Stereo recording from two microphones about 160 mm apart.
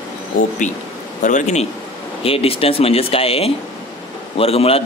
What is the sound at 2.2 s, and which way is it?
A man's voice, 35° left (ahead or behind).